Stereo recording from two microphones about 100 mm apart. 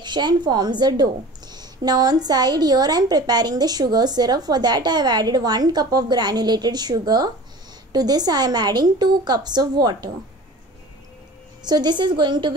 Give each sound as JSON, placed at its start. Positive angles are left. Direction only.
{"t": 0.0, "sound": "a woman's voice", "side_deg": -50}
{"t": 11.6, "sound": "a woman's voice", "side_deg": -45}